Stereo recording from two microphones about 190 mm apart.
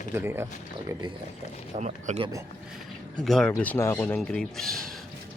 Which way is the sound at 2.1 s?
25° right (ahead or behind).